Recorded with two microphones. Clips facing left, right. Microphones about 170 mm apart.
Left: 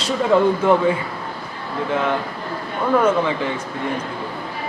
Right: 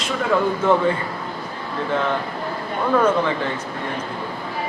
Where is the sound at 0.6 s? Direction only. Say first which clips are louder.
Left 2 dB; 10° left (ahead or behind).